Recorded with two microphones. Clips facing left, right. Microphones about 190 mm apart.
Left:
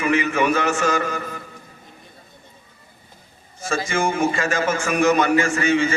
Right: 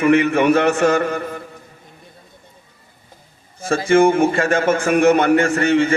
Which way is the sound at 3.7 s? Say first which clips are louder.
Right 9 dB; 60° right (ahead or behind).